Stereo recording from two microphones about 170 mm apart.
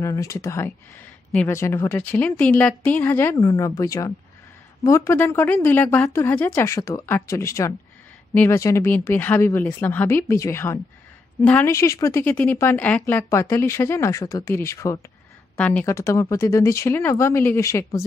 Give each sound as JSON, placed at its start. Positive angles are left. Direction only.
{"t": 0.0, "sound": "a woman's voice", "side_deg": 20}